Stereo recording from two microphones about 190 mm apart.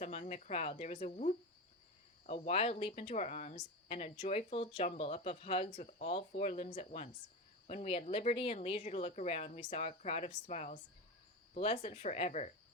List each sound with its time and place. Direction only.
0.0 s speech: 35° left (ahead or behind)